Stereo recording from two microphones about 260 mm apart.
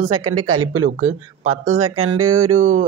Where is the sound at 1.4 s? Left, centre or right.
Right.